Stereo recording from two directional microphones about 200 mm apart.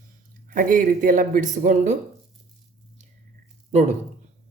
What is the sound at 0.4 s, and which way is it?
Speech, 45° right (ahead or behind).